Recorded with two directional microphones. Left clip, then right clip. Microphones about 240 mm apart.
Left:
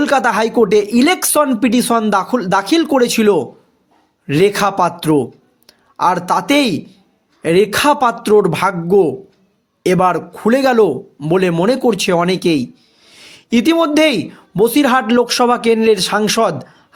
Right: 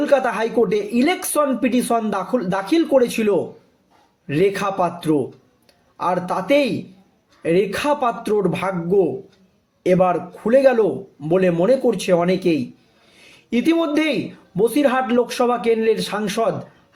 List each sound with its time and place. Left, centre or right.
0.0 s speech: left